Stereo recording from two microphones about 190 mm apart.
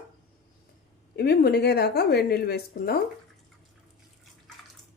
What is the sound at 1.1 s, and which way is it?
Speech, 60° left (ahead or behind).